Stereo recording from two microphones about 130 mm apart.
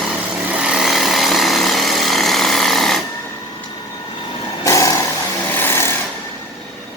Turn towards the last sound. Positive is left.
turn(degrees=20)  # may be behind; listen again after turning